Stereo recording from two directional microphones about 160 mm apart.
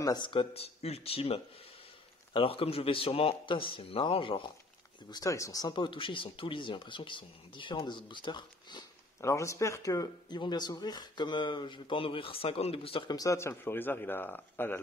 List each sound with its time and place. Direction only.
0.0 s speech: 25° left (ahead or behind)
5.1 s speech: 20° left (ahead or behind)
9.2 s speech: 20° left (ahead or behind)